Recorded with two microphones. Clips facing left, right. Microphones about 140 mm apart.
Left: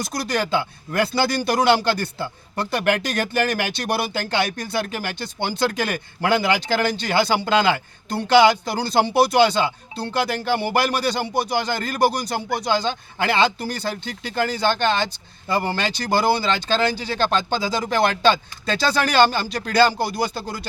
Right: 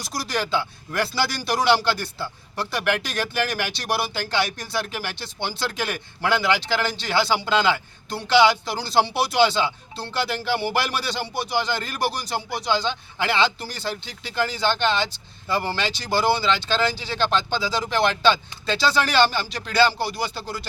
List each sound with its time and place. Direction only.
0.0 s speech: 50° left (ahead or behind)